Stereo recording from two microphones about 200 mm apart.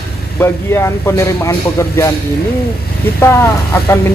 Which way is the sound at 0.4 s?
15° left (ahead or behind).